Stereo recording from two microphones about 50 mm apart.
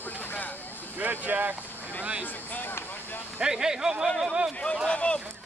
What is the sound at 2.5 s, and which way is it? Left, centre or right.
Speech, left.